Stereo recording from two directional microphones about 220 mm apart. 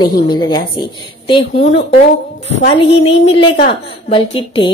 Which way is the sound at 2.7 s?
25° left (ahead or behind).